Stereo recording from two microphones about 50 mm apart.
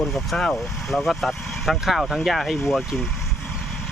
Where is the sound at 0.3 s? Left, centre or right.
Centre.